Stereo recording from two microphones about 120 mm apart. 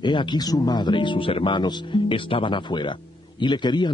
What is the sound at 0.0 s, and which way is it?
Speech, 40° left (ahead or behind).